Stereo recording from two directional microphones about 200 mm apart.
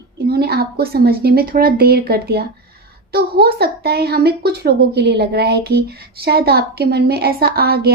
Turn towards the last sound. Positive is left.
turn(degrees=-50)  # may be behind; listen again after turning